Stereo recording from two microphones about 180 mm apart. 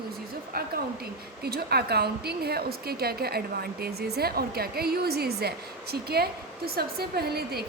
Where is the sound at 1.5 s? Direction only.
60° right (ahead or behind).